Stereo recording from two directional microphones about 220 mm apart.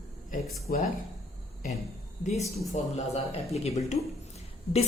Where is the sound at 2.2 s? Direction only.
30° left (ahead or behind).